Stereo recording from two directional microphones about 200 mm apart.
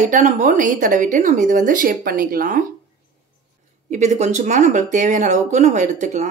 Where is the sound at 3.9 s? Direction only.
35° right (ahead or behind).